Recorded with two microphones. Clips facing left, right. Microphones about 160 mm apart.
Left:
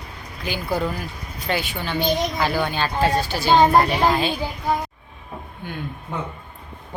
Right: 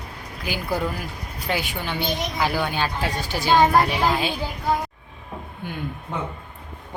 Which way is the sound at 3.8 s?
5° right (ahead or behind).